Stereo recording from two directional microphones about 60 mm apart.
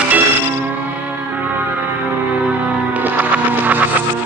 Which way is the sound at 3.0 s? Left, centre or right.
Right.